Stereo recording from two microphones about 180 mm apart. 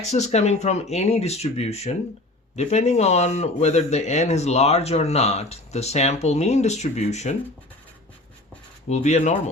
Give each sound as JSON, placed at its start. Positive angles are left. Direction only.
{"t": 0.0, "sound": "speech", "side_deg": 40}
{"t": 8.9, "sound": "speech", "side_deg": 40}